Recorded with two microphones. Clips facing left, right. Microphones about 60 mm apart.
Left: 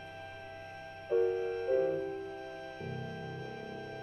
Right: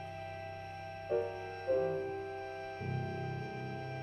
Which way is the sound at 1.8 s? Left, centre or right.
Right.